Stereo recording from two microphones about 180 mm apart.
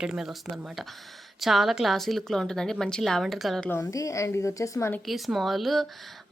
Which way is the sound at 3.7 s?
15° left (ahead or behind).